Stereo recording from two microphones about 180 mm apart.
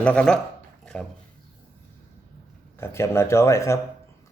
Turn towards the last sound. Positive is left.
turn(degrees=15)  # may be behind; listen again after turning